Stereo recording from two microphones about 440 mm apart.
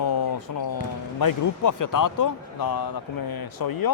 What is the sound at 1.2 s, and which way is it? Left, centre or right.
Speech, left.